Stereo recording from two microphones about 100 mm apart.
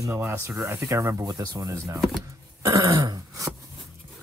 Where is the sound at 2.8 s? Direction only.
35° right (ahead or behind).